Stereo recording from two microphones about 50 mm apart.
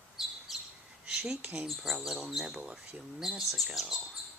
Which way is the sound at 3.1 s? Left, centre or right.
Centre.